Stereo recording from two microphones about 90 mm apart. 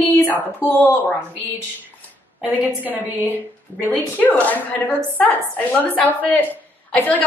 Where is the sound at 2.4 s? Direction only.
20° right (ahead or behind).